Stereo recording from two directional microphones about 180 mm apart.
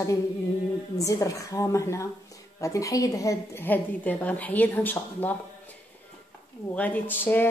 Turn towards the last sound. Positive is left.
turn(degrees=10)  # may be behind; listen again after turning